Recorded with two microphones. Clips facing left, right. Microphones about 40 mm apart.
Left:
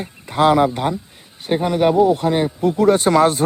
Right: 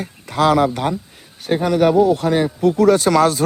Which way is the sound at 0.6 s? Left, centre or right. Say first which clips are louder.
Even; centre.